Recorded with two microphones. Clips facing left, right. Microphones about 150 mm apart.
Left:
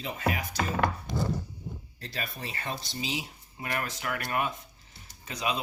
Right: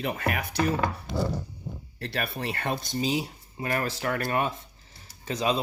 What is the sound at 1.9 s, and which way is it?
Speech, 65° right (ahead or behind).